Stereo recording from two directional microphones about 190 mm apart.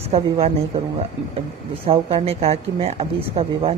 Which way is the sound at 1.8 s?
30° right (ahead or behind).